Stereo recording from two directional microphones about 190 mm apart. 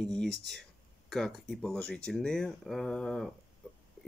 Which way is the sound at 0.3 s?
60° right (ahead or behind).